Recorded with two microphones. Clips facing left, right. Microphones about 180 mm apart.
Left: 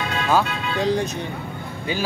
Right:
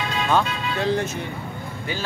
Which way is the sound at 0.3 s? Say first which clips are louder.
Left 2 dB; 10° left (ahead or behind).